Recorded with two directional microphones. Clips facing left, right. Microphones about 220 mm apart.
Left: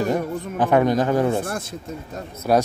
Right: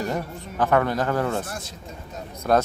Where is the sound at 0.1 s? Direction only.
15° left (ahead or behind).